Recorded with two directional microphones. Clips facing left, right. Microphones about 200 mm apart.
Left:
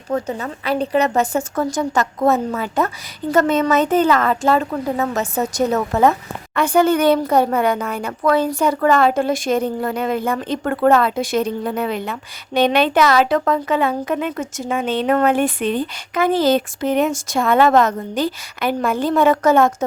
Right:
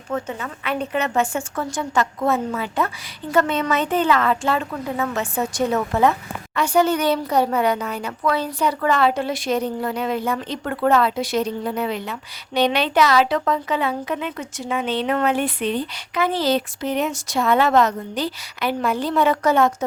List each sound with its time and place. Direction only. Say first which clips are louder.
0.1 s a woman's voice: left 4 dB; 35° left (ahead or behind)